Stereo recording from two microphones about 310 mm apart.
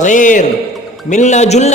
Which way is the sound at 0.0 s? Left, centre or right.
Left.